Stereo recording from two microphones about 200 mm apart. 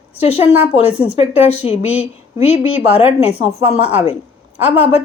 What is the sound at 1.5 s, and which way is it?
Speech, 30° left (ahead or behind).